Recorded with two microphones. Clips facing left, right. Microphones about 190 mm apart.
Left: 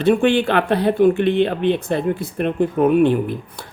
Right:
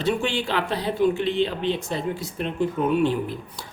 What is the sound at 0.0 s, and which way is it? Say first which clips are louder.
A woman's voice: left 9 dB; 55° left (ahead or behind).